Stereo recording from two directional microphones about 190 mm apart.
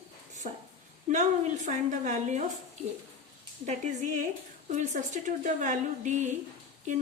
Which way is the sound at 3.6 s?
40° right (ahead or behind).